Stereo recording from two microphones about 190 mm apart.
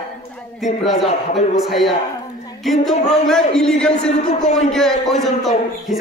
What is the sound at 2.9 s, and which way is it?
Speech, 40° left (ahead or behind).